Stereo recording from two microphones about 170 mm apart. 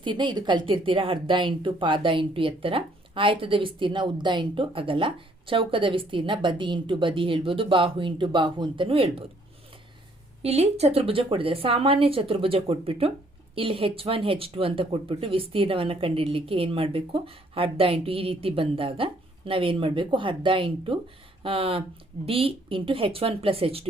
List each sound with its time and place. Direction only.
0.0 s speech: 25° right (ahead or behind)
10.4 s speech: 35° right (ahead or behind)